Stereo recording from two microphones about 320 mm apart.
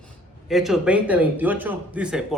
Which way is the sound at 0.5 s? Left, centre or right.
Centre.